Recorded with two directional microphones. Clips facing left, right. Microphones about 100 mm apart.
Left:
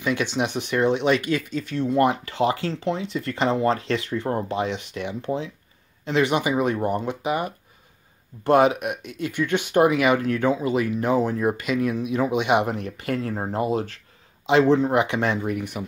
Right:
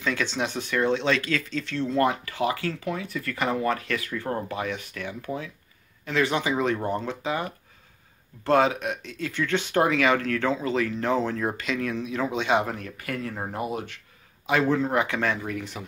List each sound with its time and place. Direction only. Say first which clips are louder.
0.0 s speech: left 3 dB; 15° left (ahead or behind)